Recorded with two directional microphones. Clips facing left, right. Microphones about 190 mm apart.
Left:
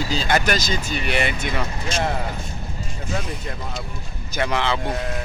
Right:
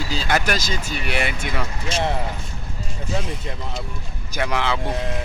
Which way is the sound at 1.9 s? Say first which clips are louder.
Right 1 dB; 35° right (ahead or behind).